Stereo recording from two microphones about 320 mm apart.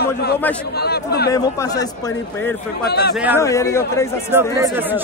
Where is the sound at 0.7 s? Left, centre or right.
Left.